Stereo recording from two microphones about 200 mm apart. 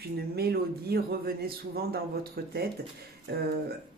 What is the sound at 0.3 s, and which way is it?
Speech, 50° right (ahead or behind).